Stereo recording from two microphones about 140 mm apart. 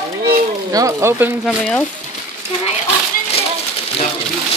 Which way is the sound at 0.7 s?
20° right (ahead or behind).